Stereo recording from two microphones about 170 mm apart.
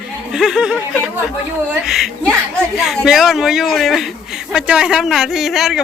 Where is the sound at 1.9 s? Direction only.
Centre (ahead or behind).